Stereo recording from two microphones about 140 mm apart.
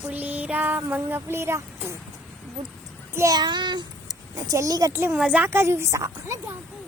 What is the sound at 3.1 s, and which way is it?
Child singing, 25° right (ahead or behind).